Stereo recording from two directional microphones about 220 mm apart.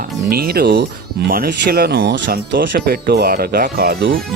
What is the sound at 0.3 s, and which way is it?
Speech, 45° right (ahead or behind).